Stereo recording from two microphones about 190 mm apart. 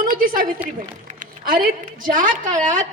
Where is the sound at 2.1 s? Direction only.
45° right (ahead or behind).